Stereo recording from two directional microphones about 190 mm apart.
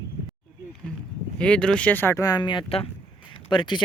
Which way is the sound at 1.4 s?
5° left (ahead or behind).